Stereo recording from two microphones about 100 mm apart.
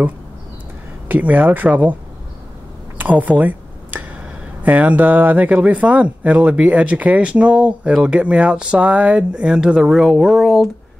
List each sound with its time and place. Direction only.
1.0 s speech: 15° right (ahead or behind)
3.0 s a sound: 15° right (ahead or behind)
4.6 s speech: 15° right (ahead or behind)